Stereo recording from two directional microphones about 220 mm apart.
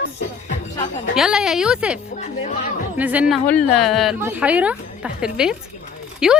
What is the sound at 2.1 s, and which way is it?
Speech, 35° left (ahead or behind).